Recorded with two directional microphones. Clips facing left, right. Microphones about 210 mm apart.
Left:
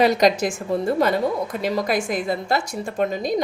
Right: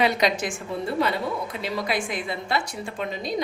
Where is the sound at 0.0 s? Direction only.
40° left (ahead or behind).